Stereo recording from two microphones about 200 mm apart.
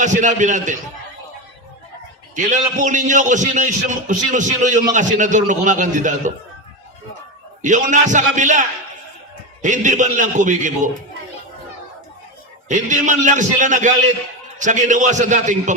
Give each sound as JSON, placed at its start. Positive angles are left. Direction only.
{"t": 0.0, "sound": "a man's voice", "side_deg": -40}
{"t": 2.3, "sound": "a man's voice", "side_deg": -40}
{"t": 7.6, "sound": "a man's voice", "side_deg": -40}
{"t": 12.6, "sound": "a man's voice", "side_deg": -40}